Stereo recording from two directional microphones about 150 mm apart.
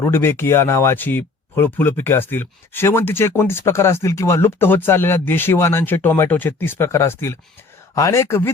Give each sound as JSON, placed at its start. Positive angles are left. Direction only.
{"t": 0.0, "sound": "speech", "side_deg": 15}